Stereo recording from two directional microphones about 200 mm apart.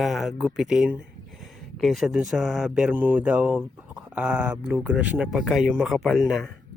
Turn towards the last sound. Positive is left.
turn(degrees=0)  # may be behind; listen again after turning